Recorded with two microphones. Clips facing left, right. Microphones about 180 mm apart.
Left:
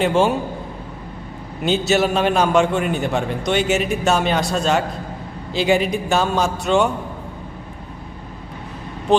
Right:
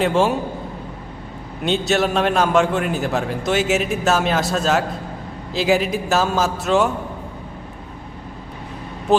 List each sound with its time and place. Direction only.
0.0 s a man's voice: centre (ahead or behind)
1.6 s a man's voice: centre (ahead or behind)
9.1 s vehicle: 5° right (ahead or behind)